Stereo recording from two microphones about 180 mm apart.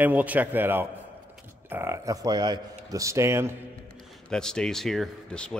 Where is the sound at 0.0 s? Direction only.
10° right (ahead or behind).